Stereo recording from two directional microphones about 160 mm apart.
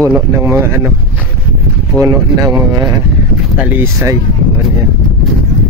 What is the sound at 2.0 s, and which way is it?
Speech, 20° right (ahead or behind).